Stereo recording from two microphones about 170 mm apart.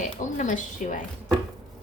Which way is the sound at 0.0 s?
45° left (ahead or behind).